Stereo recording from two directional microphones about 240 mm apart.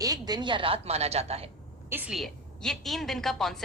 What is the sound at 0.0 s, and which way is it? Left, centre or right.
A woman's voice, centre.